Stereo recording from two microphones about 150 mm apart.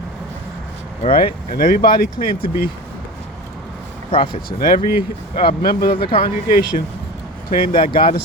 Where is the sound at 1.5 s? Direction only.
75° left (ahead or behind).